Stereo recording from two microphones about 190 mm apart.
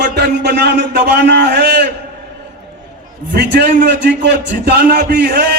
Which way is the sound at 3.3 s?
60° right (ahead or behind).